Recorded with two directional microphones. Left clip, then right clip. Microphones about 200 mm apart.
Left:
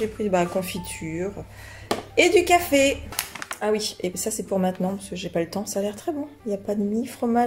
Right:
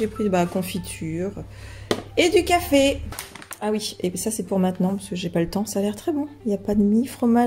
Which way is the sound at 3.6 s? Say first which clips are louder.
Left 1 dB; 20° right (ahead or behind).